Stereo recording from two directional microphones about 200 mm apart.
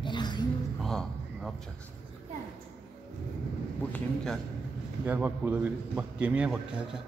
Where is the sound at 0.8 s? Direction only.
Centre (ahead or behind).